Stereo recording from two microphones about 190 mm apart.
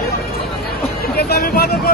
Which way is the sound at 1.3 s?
55° left (ahead or behind).